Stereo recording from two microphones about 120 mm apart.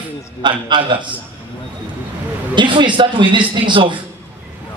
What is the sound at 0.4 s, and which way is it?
Speech, 40° right (ahead or behind).